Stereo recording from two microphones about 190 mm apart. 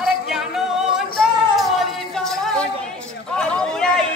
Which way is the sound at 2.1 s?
Centre (ahead or behind).